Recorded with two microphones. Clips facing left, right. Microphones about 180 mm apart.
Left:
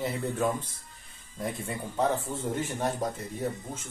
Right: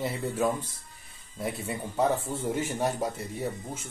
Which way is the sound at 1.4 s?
5° right (ahead or behind).